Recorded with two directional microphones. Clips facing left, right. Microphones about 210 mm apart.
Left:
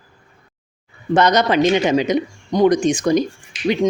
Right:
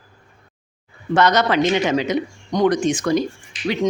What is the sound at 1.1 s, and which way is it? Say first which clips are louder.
A man's voice: left 2 dB; 20° left (ahead or behind).